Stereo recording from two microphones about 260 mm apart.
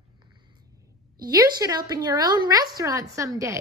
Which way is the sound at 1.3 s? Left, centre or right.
Centre.